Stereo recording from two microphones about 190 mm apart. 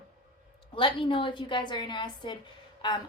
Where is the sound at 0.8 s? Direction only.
25° left (ahead or behind).